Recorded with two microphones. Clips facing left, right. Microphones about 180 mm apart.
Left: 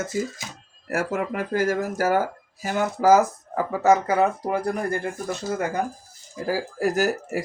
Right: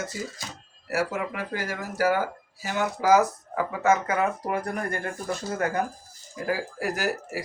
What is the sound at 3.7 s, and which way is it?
Speech, 35° left (ahead or behind).